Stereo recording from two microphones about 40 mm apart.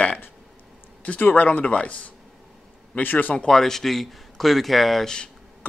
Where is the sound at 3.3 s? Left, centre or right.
Left.